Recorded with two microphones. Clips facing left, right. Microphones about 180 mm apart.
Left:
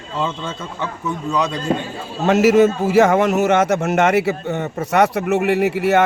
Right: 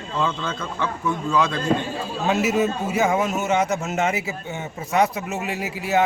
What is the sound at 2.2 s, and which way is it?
A man's voice, 75° left (ahead or behind).